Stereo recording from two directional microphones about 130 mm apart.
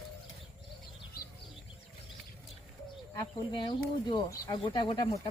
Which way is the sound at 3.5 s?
35° left (ahead or behind).